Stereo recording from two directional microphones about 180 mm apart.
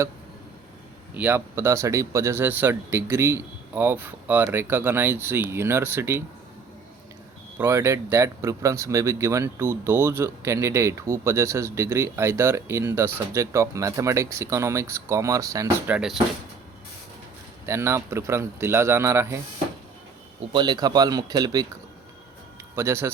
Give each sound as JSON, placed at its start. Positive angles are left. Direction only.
{"t": 1.1, "sound": "speech", "side_deg": -10}
{"t": 7.6, "sound": "speech", "side_deg": -15}
{"t": 17.7, "sound": "speech", "side_deg": -15}
{"t": 20.5, "sound": "speech", "side_deg": -25}
{"t": 22.7, "sound": "speech", "side_deg": -15}